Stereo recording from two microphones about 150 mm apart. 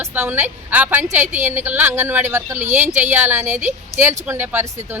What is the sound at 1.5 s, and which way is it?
Speech, 10° right (ahead or behind).